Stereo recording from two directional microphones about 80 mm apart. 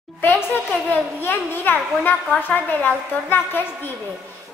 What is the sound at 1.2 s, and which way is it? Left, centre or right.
A woman's voice, left.